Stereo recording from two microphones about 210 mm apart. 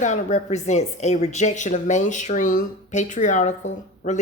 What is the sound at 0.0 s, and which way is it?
A woman's voice, 35° left (ahead or behind).